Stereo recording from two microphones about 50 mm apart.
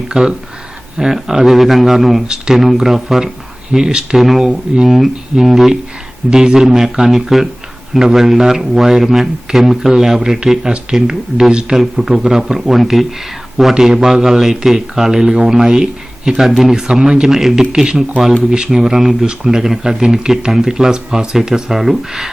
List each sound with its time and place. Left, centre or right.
0.1 s speech: centre
2.2 s speech: centre